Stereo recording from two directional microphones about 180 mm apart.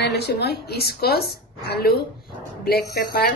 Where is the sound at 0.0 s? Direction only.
65° left (ahead or behind).